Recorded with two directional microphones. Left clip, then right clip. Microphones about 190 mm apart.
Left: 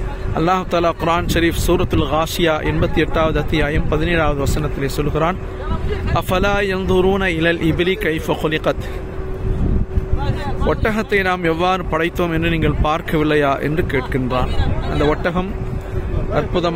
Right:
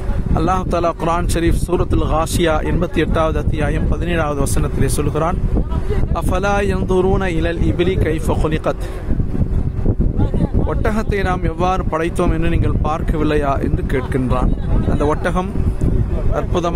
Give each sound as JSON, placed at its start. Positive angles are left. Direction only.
{"t": 0.4, "sound": "speech", "side_deg": -10}
{"t": 10.7, "sound": "speech", "side_deg": -5}